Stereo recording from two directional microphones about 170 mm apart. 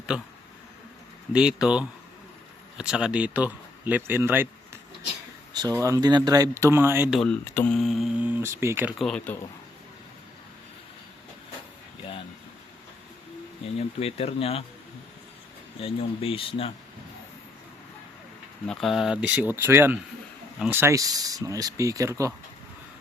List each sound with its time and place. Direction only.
0.1 s speech: 5° right (ahead or behind)
1.3 s speech: 5° right (ahead or behind)
5.5 s speech: 20° right (ahead or behind)
7.1 s speech: centre (ahead or behind)
7.5 s mantra: 10° left (ahead or behind)
7.8 s speech: centre (ahead or behind)
9.0 s speech: 5° left (ahead or behind)
13.7 s speech: 35° left (ahead or behind)
15.8 s speech: 35° left (ahead or behind)
18.7 s speech: centre (ahead or behind); by 22.3 s 20° right (ahead or behind)